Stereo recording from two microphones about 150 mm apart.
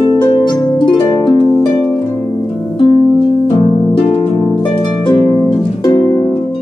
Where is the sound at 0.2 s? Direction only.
30° left (ahead or behind).